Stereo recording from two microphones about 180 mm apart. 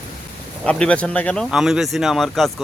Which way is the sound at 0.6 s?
5° left (ahead or behind).